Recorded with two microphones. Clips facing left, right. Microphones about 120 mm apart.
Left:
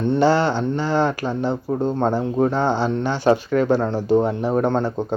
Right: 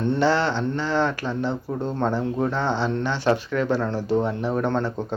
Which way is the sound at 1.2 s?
40° left (ahead or behind).